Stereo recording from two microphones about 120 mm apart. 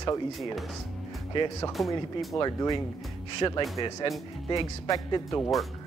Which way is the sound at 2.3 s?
35° left (ahead or behind).